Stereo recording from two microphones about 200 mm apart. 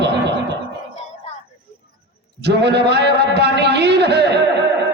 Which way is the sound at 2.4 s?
55° right (ahead or behind).